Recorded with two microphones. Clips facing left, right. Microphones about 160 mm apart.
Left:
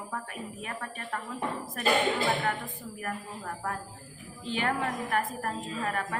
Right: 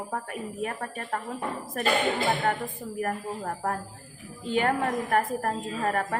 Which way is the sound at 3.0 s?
40° right (ahead or behind).